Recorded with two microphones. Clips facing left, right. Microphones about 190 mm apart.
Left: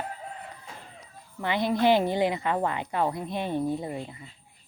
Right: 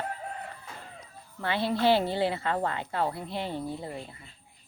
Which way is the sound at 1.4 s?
15° left (ahead or behind).